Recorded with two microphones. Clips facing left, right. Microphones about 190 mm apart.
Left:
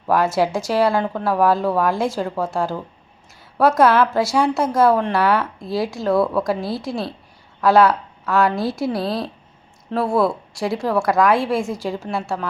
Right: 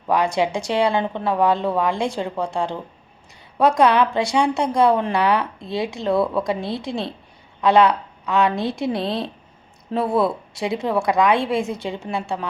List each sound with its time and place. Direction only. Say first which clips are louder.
0.2 s a woman's voice: left 2 dB; 5° left (ahead or behind)
8.9 s speech: left 1 dB; 20° right (ahead or behind)
10.1 s a woman's voice: left 2 dB; centre (ahead or behind)